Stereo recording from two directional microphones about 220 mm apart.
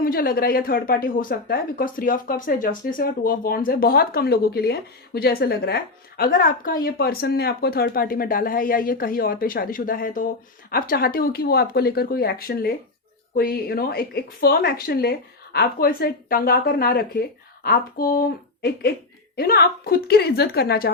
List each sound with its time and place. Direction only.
0.0 s a woman's voice: 40° left (ahead or behind)